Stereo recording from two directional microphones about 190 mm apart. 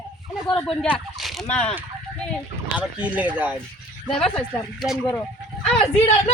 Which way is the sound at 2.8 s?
10° right (ahead or behind).